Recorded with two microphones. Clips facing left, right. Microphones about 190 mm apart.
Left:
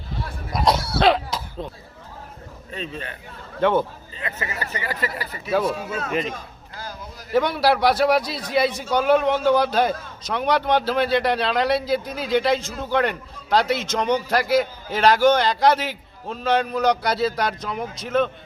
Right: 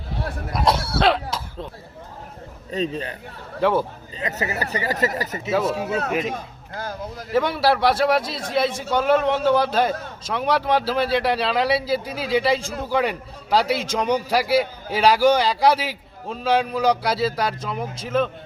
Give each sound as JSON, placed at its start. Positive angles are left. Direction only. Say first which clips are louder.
{"t": 0.5, "sound": "speech", "louder": "left 1 dB", "side_deg": -5}
{"t": 2.6, "sound": "speech", "louder": "right 7 dB", "side_deg": -35}
{"t": 3.6, "sound": "a man's voice", "louder": "left 1 dB", "side_deg": -5}
{"t": 4.2, "sound": "speech", "louder": "right 4 dB", "side_deg": -40}
{"t": 5.7, "sound": "speech", "louder": "right 4 dB", "side_deg": -65}
{"t": 6.3, "sound": "a sound", "louder": "right 5 dB", "side_deg": -55}
{"t": 7.3, "sound": "a man's voice", "louder": "even", "side_deg": 0}